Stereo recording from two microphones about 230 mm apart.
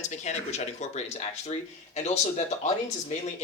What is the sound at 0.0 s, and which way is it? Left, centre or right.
Speech, left.